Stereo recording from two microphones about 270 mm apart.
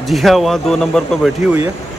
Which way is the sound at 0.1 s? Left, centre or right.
Centre.